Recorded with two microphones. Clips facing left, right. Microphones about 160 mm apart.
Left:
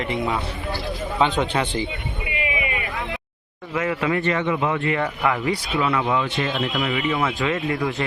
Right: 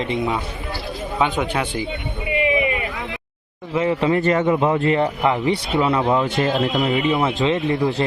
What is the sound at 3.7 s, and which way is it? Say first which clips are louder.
A man's voice: right 4 dB; 25° right (ahead or behind).